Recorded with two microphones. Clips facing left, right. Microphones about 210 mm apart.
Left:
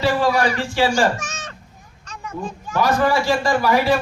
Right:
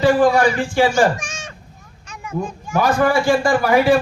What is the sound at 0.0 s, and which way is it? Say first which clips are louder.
A man's voice: right 5 dB; 50° right (ahead or behind).